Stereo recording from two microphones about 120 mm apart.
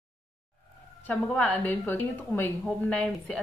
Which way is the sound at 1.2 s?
5° left (ahead or behind).